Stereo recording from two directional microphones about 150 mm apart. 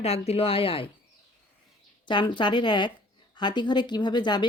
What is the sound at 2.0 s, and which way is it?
Speech, 30° left (ahead or behind).